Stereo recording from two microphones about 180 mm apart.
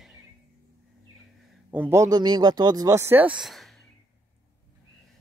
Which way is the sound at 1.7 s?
10° right (ahead or behind).